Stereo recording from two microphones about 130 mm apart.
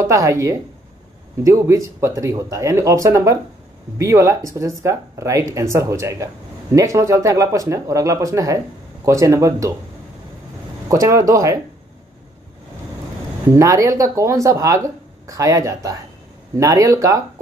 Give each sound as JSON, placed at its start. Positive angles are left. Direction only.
{"t": 0.0, "sound": "speech", "side_deg": -25}
{"t": 10.9, "sound": "speech", "side_deg": -25}
{"t": 13.5, "sound": "speech", "side_deg": -25}